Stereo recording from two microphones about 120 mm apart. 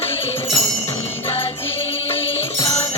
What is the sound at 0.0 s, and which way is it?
Music, 55° left (ahead or behind).